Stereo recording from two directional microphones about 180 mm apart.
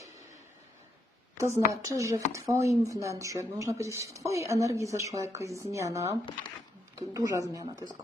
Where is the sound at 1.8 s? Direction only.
15° right (ahead or behind).